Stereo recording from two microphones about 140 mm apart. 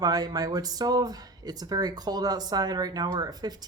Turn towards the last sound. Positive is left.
turn(degrees=-30)  # may be behind; listen again after turning